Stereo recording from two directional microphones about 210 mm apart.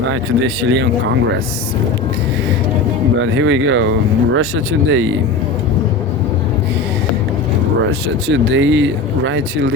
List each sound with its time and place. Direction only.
0.1 s speech: 70° right (ahead or behind)
3.2 s speech: 65° right (ahead or behind)
8.3 s speech: 60° right (ahead or behind)